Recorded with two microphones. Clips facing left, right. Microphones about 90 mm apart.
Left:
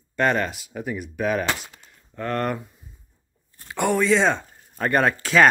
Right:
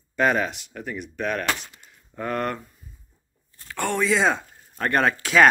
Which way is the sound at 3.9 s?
Centre (ahead or behind).